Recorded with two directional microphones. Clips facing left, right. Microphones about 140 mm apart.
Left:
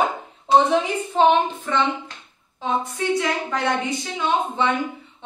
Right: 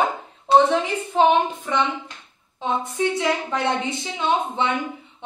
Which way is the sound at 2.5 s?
25° right (ahead or behind).